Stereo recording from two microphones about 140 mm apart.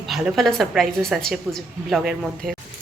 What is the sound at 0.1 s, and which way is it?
A woman's voice, centre (ahead or behind).